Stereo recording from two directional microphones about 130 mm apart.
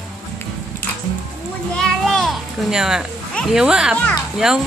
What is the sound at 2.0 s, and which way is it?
Music, centre (ahead or behind).